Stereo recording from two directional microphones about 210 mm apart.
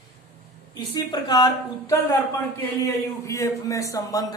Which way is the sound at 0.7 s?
20° left (ahead or behind).